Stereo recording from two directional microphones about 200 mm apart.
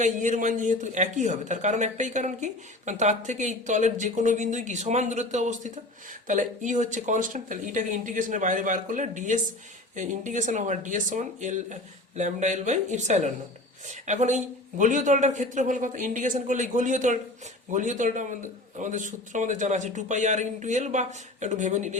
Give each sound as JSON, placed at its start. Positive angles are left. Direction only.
{"t": 0.0, "sound": "a man's voice", "side_deg": -40}